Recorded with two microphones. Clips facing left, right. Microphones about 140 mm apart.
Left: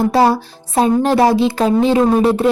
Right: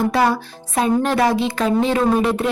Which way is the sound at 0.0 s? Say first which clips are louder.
Left 4 dB; 35° left (ahead or behind).